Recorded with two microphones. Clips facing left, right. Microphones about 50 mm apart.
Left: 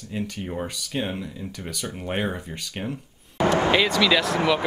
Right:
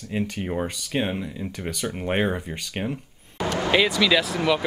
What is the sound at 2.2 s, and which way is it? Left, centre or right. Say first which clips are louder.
Speech: right 3 dB; centre.